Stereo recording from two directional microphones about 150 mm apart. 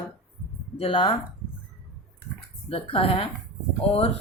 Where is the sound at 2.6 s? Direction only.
40° left (ahead or behind).